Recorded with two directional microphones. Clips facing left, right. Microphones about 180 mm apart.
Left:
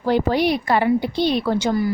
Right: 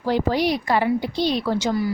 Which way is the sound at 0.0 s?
60° left (ahead or behind).